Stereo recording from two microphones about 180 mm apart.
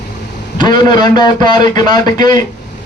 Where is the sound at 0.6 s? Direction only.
25° left (ahead or behind).